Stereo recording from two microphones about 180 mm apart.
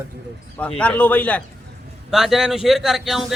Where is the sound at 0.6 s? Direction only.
5° left (ahead or behind).